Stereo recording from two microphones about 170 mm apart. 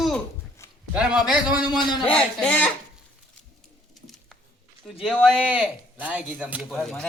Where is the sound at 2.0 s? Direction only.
5° left (ahead or behind).